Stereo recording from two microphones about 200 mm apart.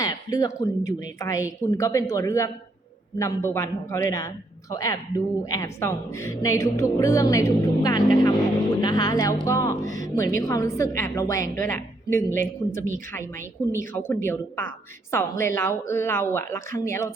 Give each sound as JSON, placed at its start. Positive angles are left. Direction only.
{"t": 0.0, "sound": "a woman's voice", "side_deg": 20}